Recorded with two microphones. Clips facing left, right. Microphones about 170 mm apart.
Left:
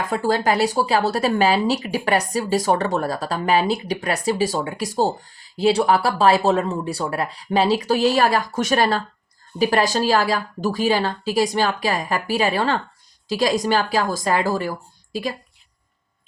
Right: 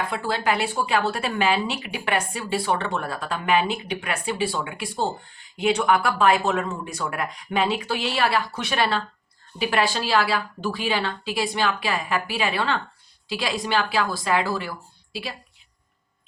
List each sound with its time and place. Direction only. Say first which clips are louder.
0.1 s speech: left 5 dB; 40° left (ahead or behind)